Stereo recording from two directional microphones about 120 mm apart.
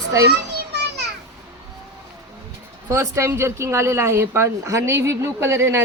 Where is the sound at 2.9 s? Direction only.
25° right (ahead or behind).